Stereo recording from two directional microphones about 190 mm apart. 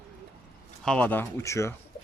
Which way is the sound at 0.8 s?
5° left (ahead or behind).